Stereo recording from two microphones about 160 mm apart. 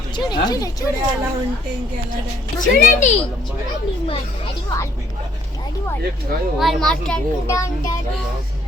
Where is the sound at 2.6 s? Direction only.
55° left (ahead or behind).